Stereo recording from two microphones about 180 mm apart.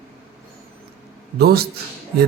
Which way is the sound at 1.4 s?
60° right (ahead or behind).